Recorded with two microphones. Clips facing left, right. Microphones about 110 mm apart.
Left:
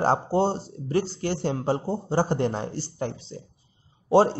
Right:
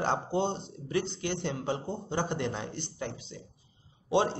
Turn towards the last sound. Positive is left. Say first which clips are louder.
# left 8 dB
turn(degrees=40)  # may be behind; listen again after turning